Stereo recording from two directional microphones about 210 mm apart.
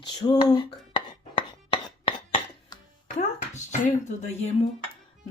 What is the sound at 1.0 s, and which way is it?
Chopping, 25° left (ahead or behind).